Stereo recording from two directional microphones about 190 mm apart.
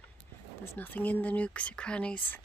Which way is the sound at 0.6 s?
10° left (ahead or behind).